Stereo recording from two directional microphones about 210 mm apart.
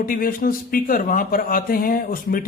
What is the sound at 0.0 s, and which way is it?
A man's voice, 40° left (ahead or behind).